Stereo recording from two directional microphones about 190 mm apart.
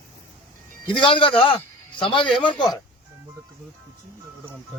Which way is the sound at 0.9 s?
25° left (ahead or behind).